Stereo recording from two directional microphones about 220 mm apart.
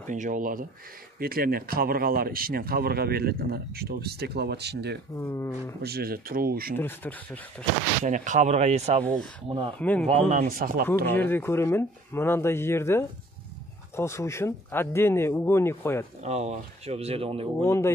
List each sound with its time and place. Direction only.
0.0 s speech: 35° right (ahead or behind)
5.1 s speech: 10° left (ahead or behind)
5.8 s speech: 45° right (ahead or behind)
6.8 s speech: 10° left (ahead or behind)
8.0 s speech: 35° right (ahead or behind)
9.0 s speech: 5° left (ahead or behind)
9.5 s speech: 20° right (ahead or behind)
9.8 s speech: 5° left (ahead or behind)
10.0 s speech: 30° right (ahead or behind)
11.1 s speech: 10° left (ahead or behind)
16.2 s speech: 30° right (ahead or behind)
17.6 s speech: 10° left (ahead or behind)